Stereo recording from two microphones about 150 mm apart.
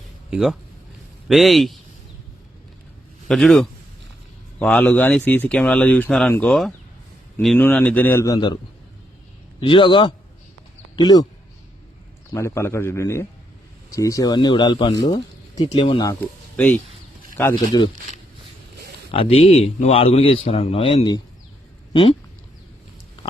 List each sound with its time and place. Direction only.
0.3 s a man's voice: 5° right (ahead or behind)
3.2 s a man's voice: centre (ahead or behind); by 8.5 s 25° left (ahead or behind)
9.6 s speech: 35° left (ahead or behind)
12.3 s speech: 20° left (ahead or behind); by 16.0 s 35° left (ahead or behind)
16.6 s speech: 10° left (ahead or behind)
17.7 s speech: 25° left (ahead or behind)
19.1 s speech: 40° left (ahead or behind)